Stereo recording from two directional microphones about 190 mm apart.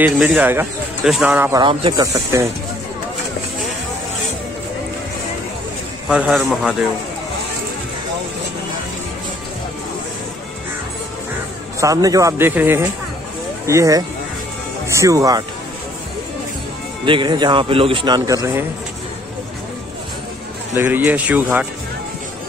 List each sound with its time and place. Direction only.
0.0 s speech: 5° right (ahead or behind)
1.6 s speech: 25° right (ahead or behind)
6.0 s a man's voice: 5° right (ahead or behind)
11.8 s speech: 20° right (ahead or behind)
17.0 s speech: 25° right (ahead or behind)
20.7 s speech: 10° right (ahead or behind)